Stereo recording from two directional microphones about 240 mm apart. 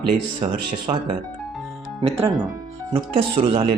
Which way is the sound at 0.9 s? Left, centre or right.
Right.